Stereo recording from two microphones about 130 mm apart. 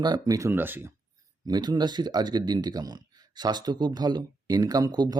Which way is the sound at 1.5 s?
30° right (ahead or behind).